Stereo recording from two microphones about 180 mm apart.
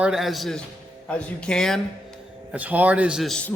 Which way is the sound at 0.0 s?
5° right (ahead or behind).